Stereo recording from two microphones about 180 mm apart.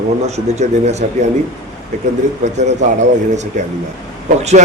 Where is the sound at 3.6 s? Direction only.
40° right (ahead or behind).